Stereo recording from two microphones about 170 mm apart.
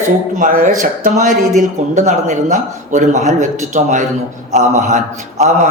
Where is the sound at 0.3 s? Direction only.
50° right (ahead or behind).